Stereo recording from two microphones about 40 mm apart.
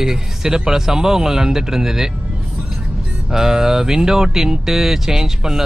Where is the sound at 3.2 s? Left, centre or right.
Centre.